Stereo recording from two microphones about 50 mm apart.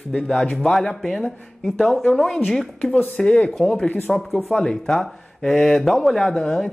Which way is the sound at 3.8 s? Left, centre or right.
Left.